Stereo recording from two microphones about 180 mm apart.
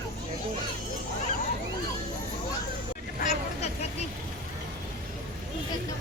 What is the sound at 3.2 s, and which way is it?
Hubbub, 40° left (ahead or behind).